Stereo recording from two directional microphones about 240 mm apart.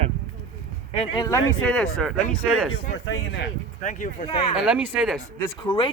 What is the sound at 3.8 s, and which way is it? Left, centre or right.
Speech, left.